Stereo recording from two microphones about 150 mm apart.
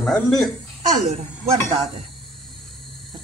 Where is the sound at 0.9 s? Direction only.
45° right (ahead or behind).